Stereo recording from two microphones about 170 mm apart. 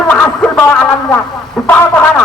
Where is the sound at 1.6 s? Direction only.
10° left (ahead or behind).